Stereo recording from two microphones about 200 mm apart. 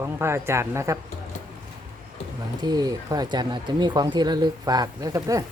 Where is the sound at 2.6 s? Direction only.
20° right (ahead or behind).